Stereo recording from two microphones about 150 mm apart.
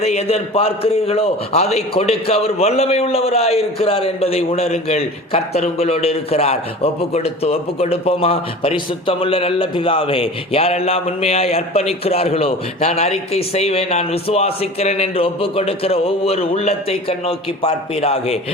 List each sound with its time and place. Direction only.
0.0 s a man's voice: 45° left (ahead or behind)